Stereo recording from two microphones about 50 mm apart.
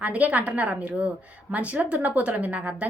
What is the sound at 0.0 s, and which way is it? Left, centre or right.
A woman's voice, right.